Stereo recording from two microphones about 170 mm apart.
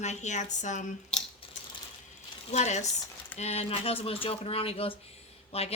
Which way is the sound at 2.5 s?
40° left (ahead or behind).